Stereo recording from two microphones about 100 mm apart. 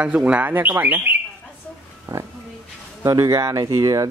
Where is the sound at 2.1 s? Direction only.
35° right (ahead or behind).